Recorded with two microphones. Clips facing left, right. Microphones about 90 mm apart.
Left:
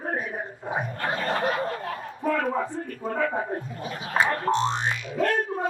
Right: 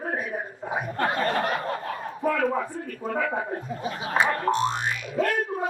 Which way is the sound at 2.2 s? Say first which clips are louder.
Right 1 dB; 5° right (ahead or behind).